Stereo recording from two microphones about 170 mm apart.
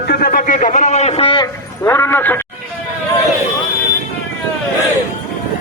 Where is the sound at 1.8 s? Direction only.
15° left (ahead or behind).